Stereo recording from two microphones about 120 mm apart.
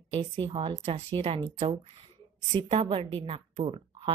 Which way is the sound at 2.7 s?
55° right (ahead or behind).